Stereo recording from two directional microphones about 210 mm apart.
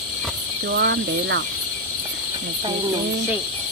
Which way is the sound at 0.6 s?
50° right (ahead or behind).